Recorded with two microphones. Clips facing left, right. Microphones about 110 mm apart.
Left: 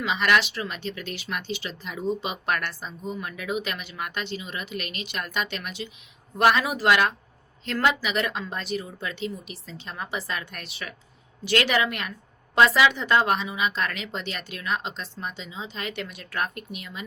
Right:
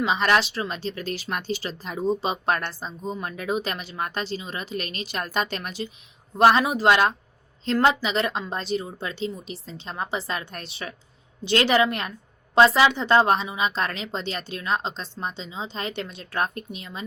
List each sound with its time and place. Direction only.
0.0 s a woman's voice: 35° right (ahead or behind)